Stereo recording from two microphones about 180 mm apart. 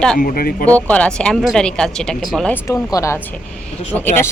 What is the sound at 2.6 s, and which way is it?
Speech, 15° left (ahead or behind).